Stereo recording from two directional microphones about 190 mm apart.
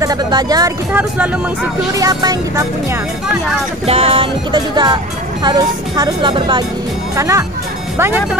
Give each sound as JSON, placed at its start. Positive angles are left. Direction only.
{"t": 0.0, "sound": "speech", "side_deg": -20}
{"t": 0.9, "sound": "music", "side_deg": -10}
{"t": 2.0, "sound": "music", "side_deg": -20}
{"t": 3.8, "sound": "speech", "side_deg": -30}
{"t": 7.2, "sound": "music", "side_deg": -15}